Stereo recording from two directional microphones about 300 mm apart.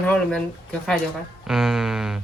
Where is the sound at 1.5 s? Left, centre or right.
Centre.